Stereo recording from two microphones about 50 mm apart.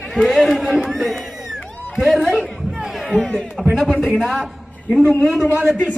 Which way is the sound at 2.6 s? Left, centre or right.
Centre.